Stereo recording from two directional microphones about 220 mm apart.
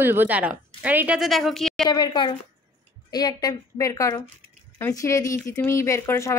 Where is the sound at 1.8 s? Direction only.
20° left (ahead or behind).